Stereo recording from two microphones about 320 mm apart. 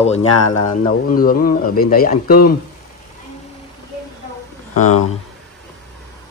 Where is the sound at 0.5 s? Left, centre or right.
Left.